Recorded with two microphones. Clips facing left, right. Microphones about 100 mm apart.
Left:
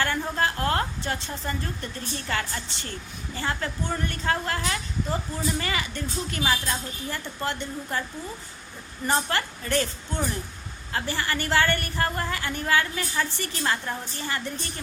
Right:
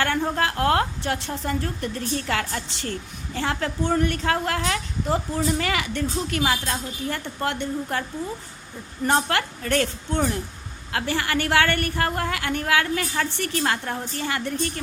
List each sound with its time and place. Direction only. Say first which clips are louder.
0.3 s a woman's voice: right 3 dB; 65° right (ahead or behind); by 2.9 s 90° right
3.3 s a woman's voice: right 4 dB; 70° right (ahead or behind)
9.0 s a woman's voice: right 4 dB; 60° right (ahead or behind)